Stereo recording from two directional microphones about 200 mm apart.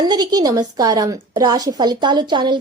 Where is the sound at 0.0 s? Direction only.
20° right (ahead or behind).